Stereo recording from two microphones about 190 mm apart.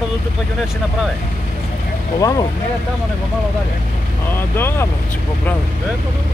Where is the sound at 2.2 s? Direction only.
20° left (ahead or behind).